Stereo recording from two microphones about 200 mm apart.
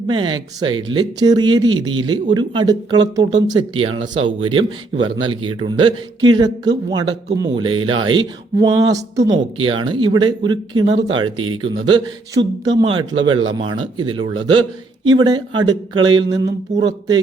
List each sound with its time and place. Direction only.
0.1 s speech: 25° right (ahead or behind)